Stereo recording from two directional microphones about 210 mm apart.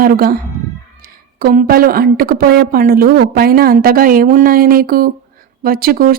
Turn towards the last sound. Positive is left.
turn(degrees=-45)  # may be behind; listen again after turning